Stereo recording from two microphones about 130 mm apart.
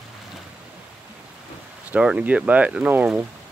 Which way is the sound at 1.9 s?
10° right (ahead or behind).